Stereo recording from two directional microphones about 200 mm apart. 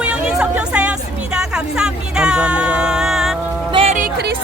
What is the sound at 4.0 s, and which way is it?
Music, 50° right (ahead or behind).